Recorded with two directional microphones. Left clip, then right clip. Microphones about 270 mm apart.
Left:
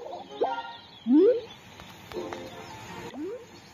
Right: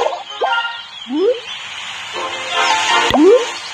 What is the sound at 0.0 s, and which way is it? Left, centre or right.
Fowl, right.